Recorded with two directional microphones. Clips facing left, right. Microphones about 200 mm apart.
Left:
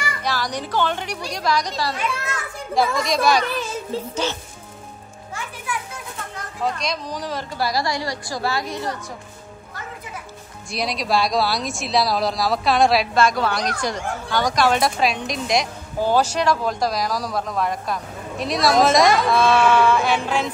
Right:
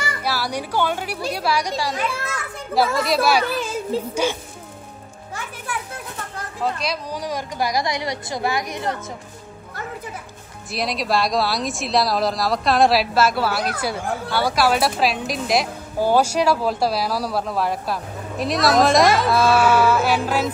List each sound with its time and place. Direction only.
0.2 s a woman's voice: 10° right (ahead or behind)
6.6 s a woman's voice: 5° right (ahead or behind)
10.7 s speech: centre (ahead or behind)